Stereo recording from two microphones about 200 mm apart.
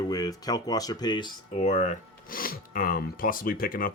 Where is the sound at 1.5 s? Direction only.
35° left (ahead or behind).